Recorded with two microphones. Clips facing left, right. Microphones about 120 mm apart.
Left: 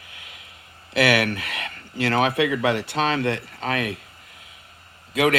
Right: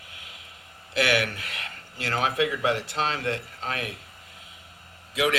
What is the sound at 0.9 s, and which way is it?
Speech, 70° left (ahead or behind).